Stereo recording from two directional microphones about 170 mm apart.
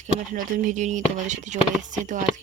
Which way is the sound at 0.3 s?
50° right (ahead or behind).